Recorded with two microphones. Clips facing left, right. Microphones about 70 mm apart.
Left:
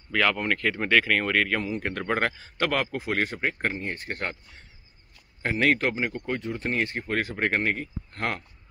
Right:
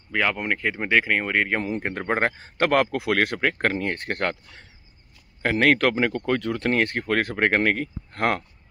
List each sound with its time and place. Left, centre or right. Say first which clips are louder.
0.1 s speech: even; centre
1.6 s a man's voice: right 2 dB; right
3.0 s speech: right 5 dB; right